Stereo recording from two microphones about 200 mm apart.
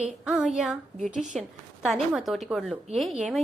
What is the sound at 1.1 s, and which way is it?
Speech, 40° right (ahead or behind).